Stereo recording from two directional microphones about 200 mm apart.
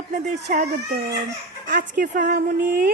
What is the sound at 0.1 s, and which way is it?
A woman's voice, 40° right (ahead or behind).